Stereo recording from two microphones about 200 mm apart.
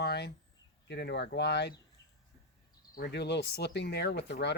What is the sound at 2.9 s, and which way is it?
Speech, 60° left (ahead or behind).